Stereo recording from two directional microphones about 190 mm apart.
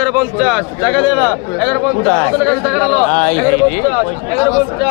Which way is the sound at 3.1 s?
40° left (ahead or behind).